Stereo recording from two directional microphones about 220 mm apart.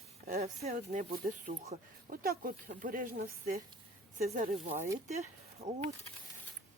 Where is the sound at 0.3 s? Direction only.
30° right (ahead or behind).